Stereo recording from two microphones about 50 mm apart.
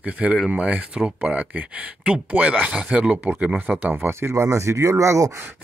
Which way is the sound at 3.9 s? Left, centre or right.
Right.